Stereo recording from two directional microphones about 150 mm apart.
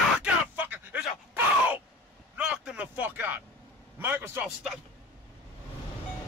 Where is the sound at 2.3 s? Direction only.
5° right (ahead or behind).